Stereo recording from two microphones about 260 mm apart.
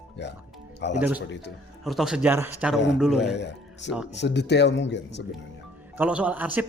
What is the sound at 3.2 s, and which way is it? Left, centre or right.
Speech, left.